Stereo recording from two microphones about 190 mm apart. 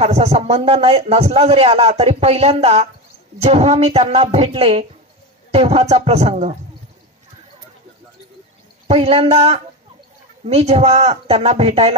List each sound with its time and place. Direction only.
0.0 s a man's voice: 35° right (ahead or behind)
8.8 s a man's voice: 30° right (ahead or behind)